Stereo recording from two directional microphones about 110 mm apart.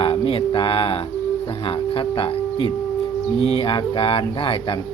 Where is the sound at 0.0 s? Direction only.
60° left (ahead or behind).